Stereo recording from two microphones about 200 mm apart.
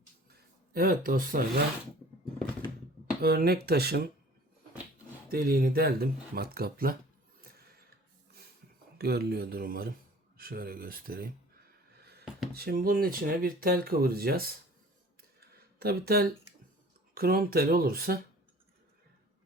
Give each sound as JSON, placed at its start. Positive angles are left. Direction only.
{"t": 0.7, "sound": "speech", "side_deg": -45}
{"t": 3.2, "sound": "speech", "side_deg": -50}
{"t": 5.3, "sound": "speech", "side_deg": -50}
{"t": 9.0, "sound": "speech", "side_deg": -50}
{"t": 12.5, "sound": "speech", "side_deg": -50}
{"t": 15.8, "sound": "speech", "side_deg": -50}